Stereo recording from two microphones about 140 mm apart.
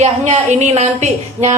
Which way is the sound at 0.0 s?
55° right (ahead or behind).